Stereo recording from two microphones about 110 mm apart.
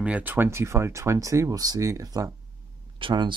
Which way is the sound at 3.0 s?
45° right (ahead or behind).